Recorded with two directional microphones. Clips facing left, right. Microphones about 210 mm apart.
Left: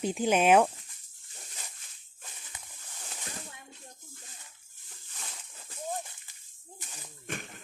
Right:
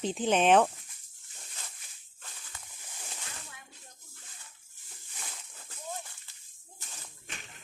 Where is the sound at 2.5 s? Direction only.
20° left (ahead or behind).